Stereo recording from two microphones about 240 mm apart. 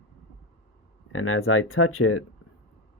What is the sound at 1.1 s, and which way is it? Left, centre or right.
Speech, left.